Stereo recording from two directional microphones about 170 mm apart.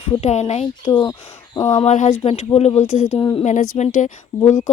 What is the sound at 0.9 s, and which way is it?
Speech, 25° left (ahead or behind).